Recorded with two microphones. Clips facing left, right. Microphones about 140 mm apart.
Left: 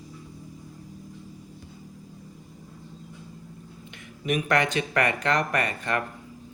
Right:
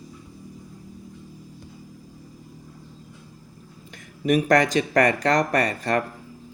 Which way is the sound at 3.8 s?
40° right (ahead or behind).